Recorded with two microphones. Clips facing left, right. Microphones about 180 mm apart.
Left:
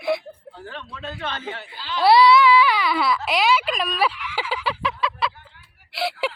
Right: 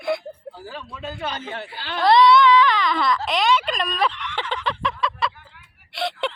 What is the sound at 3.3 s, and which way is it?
Fowl, 5° left (ahead or behind).